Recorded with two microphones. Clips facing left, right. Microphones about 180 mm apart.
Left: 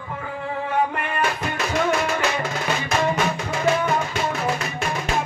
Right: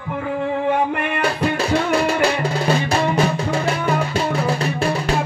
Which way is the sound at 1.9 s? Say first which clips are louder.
Right 4 dB; 35° right (ahead or behind).